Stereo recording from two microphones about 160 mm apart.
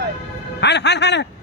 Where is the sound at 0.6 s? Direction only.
90° left.